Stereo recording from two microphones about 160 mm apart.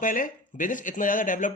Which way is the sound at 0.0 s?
55° left (ahead or behind).